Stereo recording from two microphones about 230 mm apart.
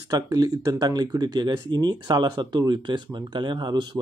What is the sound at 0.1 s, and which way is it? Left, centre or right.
Speech, centre.